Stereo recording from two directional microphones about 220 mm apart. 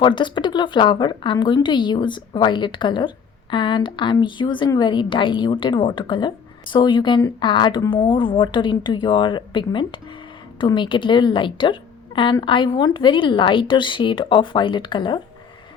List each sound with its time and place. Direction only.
0.0 s a woman's voice: 20° left (ahead or behind)